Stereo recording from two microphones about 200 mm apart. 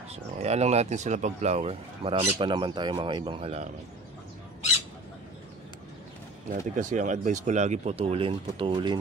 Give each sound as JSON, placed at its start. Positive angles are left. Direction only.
{"t": 0.1, "sound": "speech", "side_deg": -35}
{"t": 6.7, "sound": "speech", "side_deg": -40}